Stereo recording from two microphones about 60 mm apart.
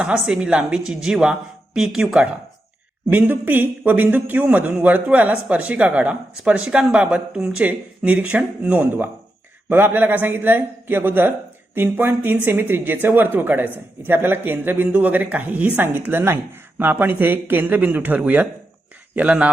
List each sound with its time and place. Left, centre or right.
0.0 s a woman's voice: centre
3.1 s speech: right; by 7.5 s centre
7.6 s speech: right